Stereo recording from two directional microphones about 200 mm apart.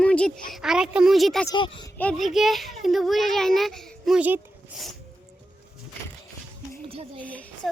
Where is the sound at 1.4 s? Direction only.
20° left (ahead or behind).